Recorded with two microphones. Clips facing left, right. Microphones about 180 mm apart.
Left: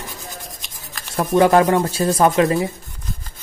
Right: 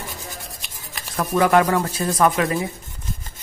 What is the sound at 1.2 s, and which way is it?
Speech, 30° left (ahead or behind).